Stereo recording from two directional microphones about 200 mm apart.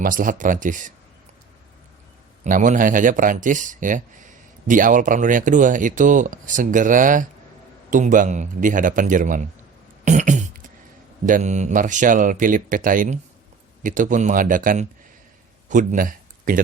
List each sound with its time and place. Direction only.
0.0 s speech: 45° right (ahead or behind)
2.4 s speech: 40° right (ahead or behind)
10.0 s music: 40° right (ahead or behind)
11.3 s speech: 40° right (ahead or behind)